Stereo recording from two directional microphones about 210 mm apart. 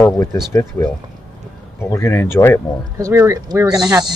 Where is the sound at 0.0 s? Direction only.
5° left (ahead or behind).